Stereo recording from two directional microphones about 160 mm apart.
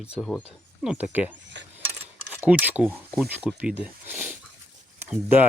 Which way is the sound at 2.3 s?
10° right (ahead or behind).